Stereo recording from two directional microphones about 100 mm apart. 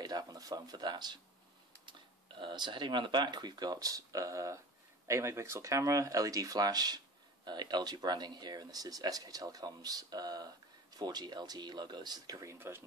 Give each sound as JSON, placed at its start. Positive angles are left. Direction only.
{"t": 0.0, "sound": "speech", "side_deg": -40}
{"t": 12.5, "sound": "speech", "side_deg": -25}